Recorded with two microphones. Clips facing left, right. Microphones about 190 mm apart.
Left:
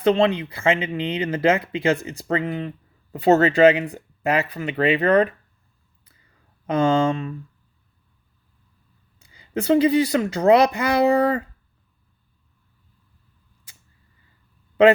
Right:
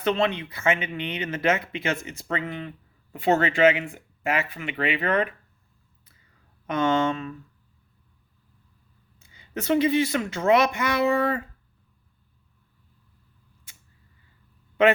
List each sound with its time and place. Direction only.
0.0 s speech: 30° left (ahead or behind)
6.7 s speech: 30° left (ahead or behind)
9.1 s speech: 30° left (ahead or behind)